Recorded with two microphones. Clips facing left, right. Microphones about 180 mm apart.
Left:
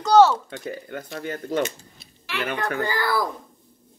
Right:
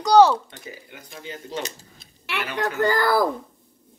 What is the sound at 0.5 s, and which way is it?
Speech, 60° left (ahead or behind).